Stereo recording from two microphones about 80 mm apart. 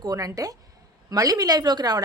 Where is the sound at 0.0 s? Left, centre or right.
Right.